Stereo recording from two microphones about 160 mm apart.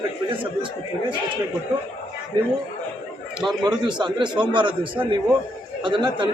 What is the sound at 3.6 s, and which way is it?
A man's voice, 30° right (ahead or behind).